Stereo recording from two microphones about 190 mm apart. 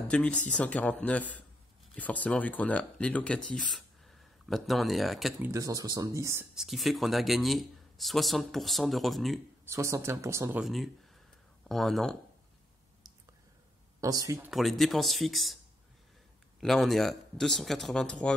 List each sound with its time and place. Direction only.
0.1 s speech: 5° left (ahead or behind)
5.5 s speech: 20° right (ahead or behind)
6.5 s speech: centre (ahead or behind)
9.7 s speech: 15° right (ahead or behind)
10.6 s speech: centre (ahead or behind)
14.0 s speech: 20° right (ahead or behind)
14.5 s speech: centre (ahead or behind)